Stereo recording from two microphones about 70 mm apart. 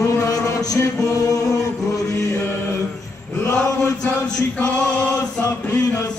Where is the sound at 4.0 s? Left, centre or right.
Left.